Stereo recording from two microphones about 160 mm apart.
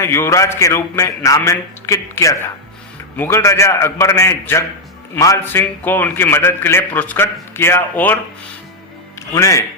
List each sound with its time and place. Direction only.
0.0 s a man's voice: 15° left (ahead or behind)
9.3 s a man's voice: 20° left (ahead or behind)